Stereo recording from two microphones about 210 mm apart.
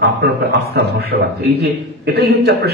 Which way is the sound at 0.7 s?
50° right (ahead or behind).